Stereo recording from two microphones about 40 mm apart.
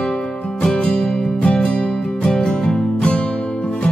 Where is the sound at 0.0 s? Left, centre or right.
Centre.